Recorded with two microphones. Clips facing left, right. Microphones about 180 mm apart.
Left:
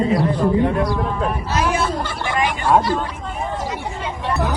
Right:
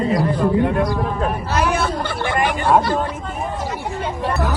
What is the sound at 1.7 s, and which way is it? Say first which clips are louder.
Hubbub: even; 60° right (ahead or behind).